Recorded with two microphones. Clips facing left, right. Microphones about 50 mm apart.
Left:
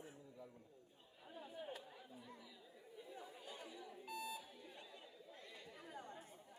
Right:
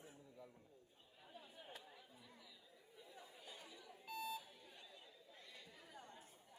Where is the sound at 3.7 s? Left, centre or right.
Centre.